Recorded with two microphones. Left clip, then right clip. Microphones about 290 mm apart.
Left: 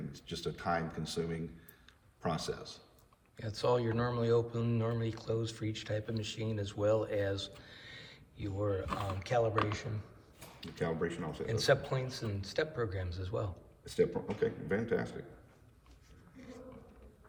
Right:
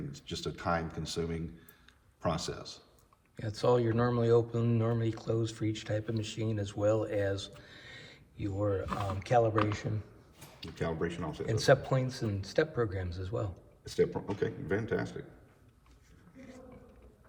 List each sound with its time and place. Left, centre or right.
0.1 s a man's voice: right
3.3 s speech: centre
10.6 s a man's voice: right
11.4 s speech: centre
13.8 s a man's voice: right